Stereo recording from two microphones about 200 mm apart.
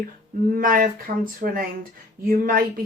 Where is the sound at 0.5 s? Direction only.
45° right (ahead or behind).